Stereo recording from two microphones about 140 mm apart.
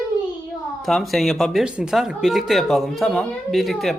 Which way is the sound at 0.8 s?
Centre (ahead or behind).